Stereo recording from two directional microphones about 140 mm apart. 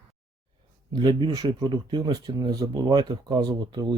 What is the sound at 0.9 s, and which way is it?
Speech, 30° right (ahead or behind).